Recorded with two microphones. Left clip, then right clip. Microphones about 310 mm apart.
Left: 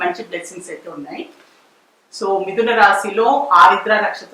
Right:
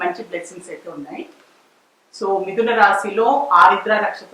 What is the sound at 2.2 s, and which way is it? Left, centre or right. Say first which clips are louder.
Speech: left 1 dB; centre.